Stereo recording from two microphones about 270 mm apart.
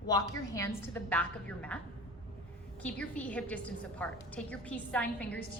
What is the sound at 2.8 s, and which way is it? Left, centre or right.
A woman's voice, centre.